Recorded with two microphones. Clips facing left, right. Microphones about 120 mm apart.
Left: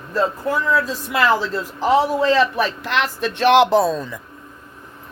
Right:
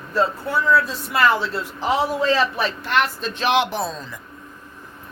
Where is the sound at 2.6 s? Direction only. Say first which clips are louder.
Left 1 dB; 90° left.